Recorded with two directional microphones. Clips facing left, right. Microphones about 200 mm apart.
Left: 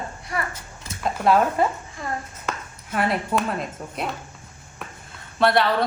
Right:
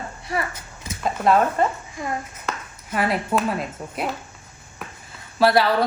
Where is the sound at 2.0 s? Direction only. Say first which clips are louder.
Right 2 dB; 15° right (ahead or behind).